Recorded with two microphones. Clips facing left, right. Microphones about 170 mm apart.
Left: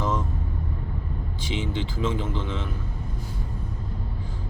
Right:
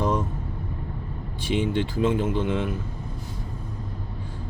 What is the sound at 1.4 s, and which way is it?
Speech, 60° right (ahead or behind).